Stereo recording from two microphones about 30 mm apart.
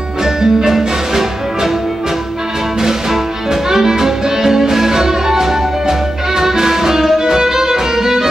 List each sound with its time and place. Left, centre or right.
0.2 s music: centre
2.8 s music: centre